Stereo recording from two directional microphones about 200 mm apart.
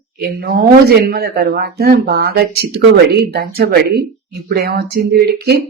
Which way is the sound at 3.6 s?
50° right (ahead or behind).